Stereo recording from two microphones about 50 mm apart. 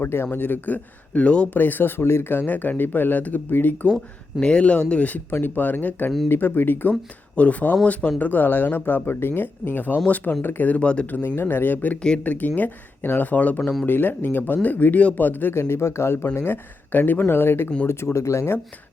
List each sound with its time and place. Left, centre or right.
0.0 s speech: left
1.5 s speech: left
3.8 s speech: left
5.3 s speech: left
6.2 s speech: left
7.3 s speech: left
10.7 s speech: left
11.3 s speech: left
13.8 s speech: left
15.5 s speech: left
16.9 s speech: left
17.2 s speech: left
17.8 s speech: left